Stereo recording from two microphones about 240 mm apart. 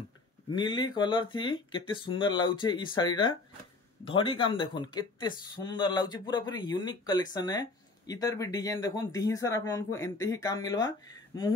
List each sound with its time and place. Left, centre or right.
0.6 s speech: centre